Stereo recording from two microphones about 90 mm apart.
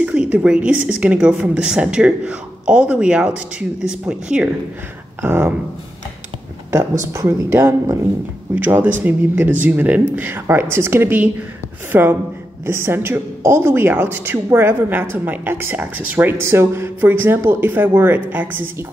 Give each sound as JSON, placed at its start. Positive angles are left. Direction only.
{"t": 0.0, "sound": "a woman's voice", "side_deg": -10}
{"t": 5.2, "sound": "a woman's voice", "side_deg": -25}
{"t": 6.7, "sound": "speech", "side_deg": -35}
{"t": 8.6, "sound": "a woman's voice", "side_deg": -20}